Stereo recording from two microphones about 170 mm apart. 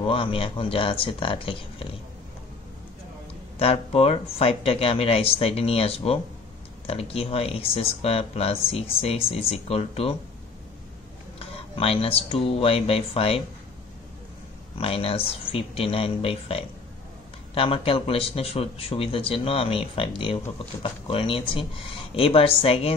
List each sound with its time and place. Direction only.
0.0 s speech: 30° left (ahead or behind)
3.5 s speech: 35° left (ahead or behind)
11.3 s speech: 35° left (ahead or behind)
14.8 s speech: 35° left (ahead or behind)